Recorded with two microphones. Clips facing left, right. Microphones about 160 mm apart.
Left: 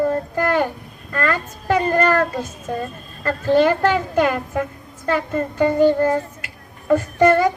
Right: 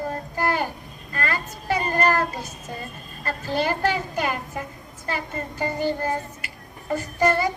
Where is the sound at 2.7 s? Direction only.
65° left (ahead or behind).